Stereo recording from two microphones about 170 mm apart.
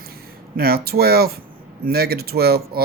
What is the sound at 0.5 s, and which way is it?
Speech, 60° right (ahead or behind).